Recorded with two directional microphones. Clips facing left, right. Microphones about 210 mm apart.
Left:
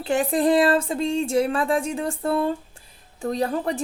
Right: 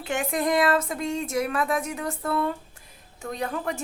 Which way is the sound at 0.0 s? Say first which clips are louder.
Left 6 dB; 35° left (ahead or behind).